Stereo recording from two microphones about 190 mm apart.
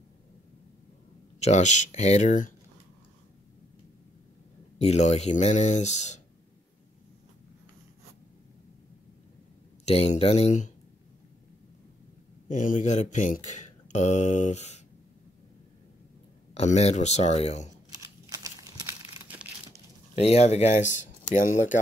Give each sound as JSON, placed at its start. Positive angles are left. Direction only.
{"t": 1.4, "sound": "speech", "side_deg": 40}
{"t": 4.7, "sound": "speech", "side_deg": 35}
{"t": 9.8, "sound": "speech", "side_deg": 35}
{"t": 12.4, "sound": "speech", "side_deg": 45}
{"t": 16.5, "sound": "speech", "side_deg": 35}
{"t": 17.9, "sound": "a sound", "side_deg": -15}
{"t": 19.2, "sound": "crumpling", "side_deg": -5}
{"t": 20.2, "sound": "speech", "side_deg": 35}